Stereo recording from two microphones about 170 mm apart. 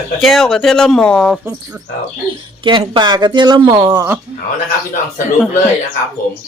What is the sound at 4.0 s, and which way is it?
Speech, 10° right (ahead or behind).